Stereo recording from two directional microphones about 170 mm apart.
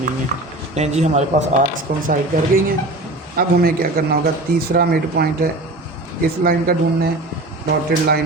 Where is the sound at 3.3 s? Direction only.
60° right (ahead or behind).